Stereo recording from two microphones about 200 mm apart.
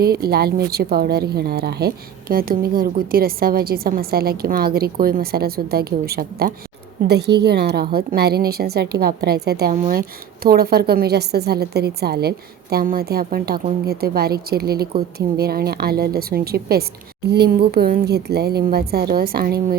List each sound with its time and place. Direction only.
0.0 s a woman's voice: 50° right (ahead or behind)